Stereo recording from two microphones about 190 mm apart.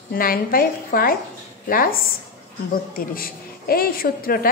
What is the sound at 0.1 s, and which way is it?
A woman's voice, 50° left (ahead or behind).